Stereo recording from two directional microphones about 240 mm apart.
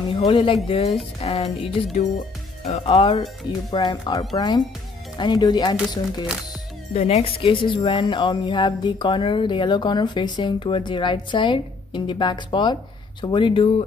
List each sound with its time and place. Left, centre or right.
0.1 s speech: left